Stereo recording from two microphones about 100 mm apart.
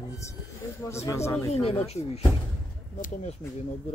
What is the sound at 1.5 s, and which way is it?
Speech, 80° left.